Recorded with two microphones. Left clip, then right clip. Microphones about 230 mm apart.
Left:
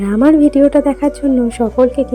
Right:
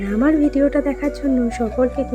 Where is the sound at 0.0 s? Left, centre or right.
Centre.